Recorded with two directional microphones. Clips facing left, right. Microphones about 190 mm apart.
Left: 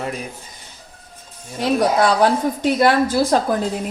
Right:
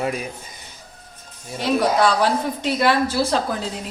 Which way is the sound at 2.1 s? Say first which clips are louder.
Left 4 dB; 50° left (ahead or behind).